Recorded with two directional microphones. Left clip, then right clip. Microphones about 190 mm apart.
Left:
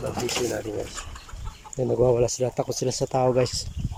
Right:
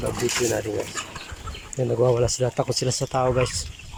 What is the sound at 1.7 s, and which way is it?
Speech, 10° left (ahead or behind).